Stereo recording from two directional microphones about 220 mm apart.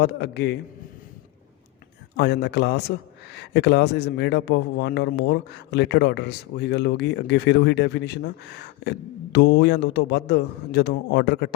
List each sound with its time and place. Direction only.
0.0 s speech: 50° left (ahead or behind)
2.1 s speech: 50° left (ahead or behind)